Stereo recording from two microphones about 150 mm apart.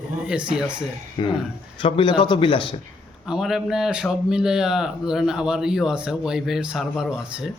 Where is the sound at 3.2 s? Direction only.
5° right (ahead or behind).